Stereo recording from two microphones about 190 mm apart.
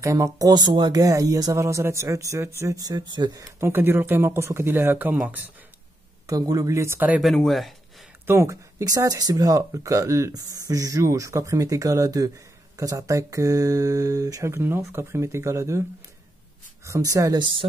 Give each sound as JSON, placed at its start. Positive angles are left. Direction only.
{"t": 0.0, "sound": "speech", "side_deg": -15}
{"t": 6.2, "sound": "speech", "side_deg": -20}
{"t": 8.3, "sound": "speech", "side_deg": -15}
{"t": 16.8, "sound": "speech", "side_deg": -15}